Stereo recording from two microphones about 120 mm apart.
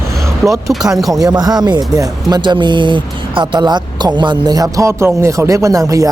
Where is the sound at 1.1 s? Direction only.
30° right (ahead or behind).